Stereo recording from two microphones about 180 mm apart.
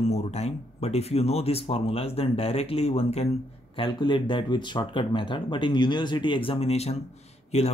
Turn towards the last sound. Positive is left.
turn(degrees=35)  # may be behind; listen again after turning